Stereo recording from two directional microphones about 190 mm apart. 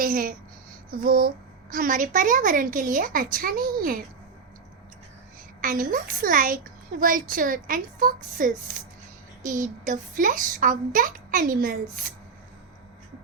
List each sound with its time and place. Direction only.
0.0 s speech: 50° right (ahead or behind)
5.6 s speech: 45° right (ahead or behind)